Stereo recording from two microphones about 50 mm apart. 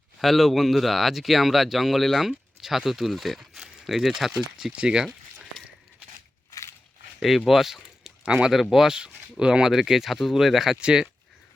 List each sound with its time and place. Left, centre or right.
0.2 s speech: centre
6.5 s a sound: left
7.2 s speech: centre
8.2 s speech: centre
10.8 s speech: centre